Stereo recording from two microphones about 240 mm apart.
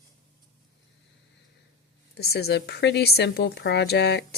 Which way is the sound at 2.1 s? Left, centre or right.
Left.